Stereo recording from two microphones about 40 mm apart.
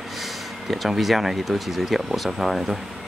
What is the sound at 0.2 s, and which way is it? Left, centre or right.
Speech, centre.